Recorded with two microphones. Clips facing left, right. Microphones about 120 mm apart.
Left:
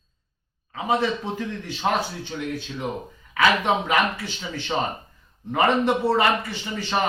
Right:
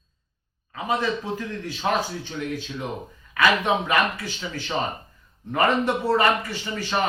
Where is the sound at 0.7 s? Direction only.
20° left (ahead or behind).